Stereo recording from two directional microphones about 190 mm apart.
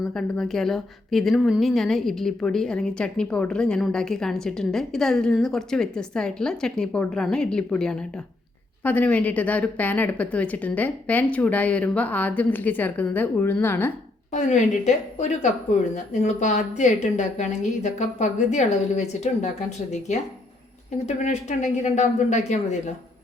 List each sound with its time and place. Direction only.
0.0 s a woman's voice: centre (ahead or behind)
14.3 s a woman's voice: 40° left (ahead or behind)
21.1 s a woman's voice: 35° left (ahead or behind)